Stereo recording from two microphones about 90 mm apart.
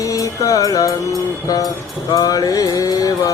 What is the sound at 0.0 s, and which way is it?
Music, 40° left (ahead or behind).